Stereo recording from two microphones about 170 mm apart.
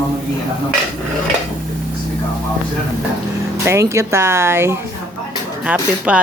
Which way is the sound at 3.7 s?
15° right (ahead or behind).